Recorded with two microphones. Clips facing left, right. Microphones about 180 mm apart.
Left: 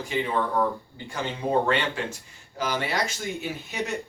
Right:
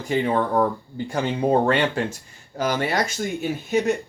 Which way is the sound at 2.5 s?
45° right (ahead or behind).